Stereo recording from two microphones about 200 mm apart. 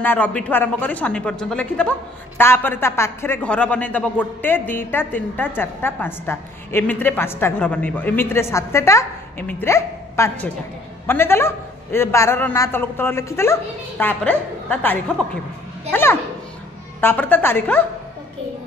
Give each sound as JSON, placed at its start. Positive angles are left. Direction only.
{"t": 0.0, "sound": "speech", "side_deg": 10}